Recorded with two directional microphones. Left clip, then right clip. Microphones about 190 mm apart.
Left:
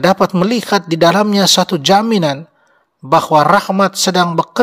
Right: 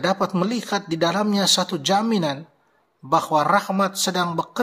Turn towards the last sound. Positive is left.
turn(degrees=35)  # may be behind; listen again after turning